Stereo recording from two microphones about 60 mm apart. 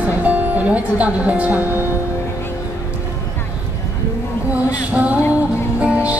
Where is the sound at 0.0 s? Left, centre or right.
Right.